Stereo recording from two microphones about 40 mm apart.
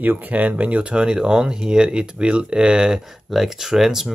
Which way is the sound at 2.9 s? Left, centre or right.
Centre.